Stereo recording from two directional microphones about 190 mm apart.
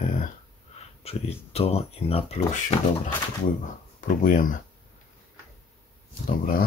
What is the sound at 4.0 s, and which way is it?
Speech, 45° left (ahead or behind).